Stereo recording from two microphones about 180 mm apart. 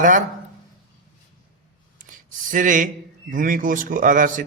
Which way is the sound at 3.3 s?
50° right (ahead or behind).